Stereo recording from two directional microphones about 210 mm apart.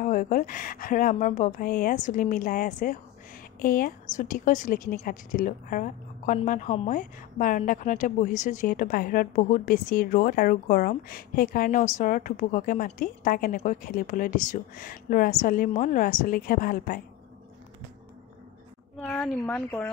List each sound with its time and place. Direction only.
0.0 s a woman's voice: 40° left (ahead or behind)
18.9 s speech: 5° left (ahead or behind)